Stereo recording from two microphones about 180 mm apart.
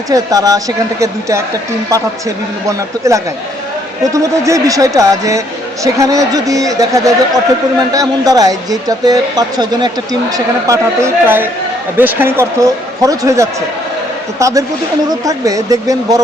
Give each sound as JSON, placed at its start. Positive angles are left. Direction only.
{"t": 0.1, "sound": "speech", "side_deg": -20}
{"t": 2.6, "sound": "speech", "side_deg": -15}